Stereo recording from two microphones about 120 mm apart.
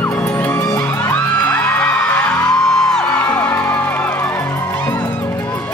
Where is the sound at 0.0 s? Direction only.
10° left (ahead or behind).